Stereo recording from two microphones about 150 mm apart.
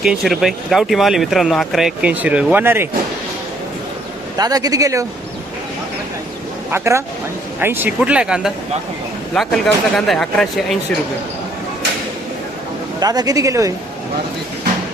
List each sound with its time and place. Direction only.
0.0 s speech: centre (ahead or behind)
4.4 s speech: 25° right (ahead or behind)
6.7 s speech: 15° right (ahead or behind); by 10.8 s 5° left (ahead or behind)
13.0 s speech: 25° right (ahead or behind)